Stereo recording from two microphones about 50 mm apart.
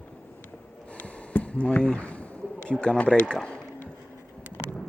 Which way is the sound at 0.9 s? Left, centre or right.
Left.